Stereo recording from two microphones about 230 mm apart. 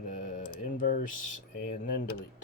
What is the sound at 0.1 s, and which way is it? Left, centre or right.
Typing, left.